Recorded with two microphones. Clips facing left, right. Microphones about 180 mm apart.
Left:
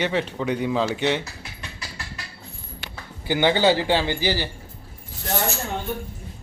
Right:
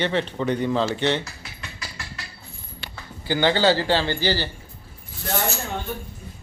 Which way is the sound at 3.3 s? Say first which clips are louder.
Left 1 dB; 15° left (ahead or behind).